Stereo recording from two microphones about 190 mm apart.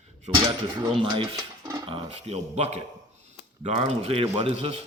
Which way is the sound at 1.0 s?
25° right (ahead or behind).